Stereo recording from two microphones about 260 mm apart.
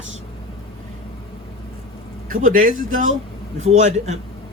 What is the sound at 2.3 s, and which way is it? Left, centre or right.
Speech, right.